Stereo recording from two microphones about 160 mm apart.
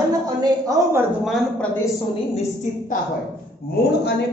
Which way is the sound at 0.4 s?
20° right (ahead or behind).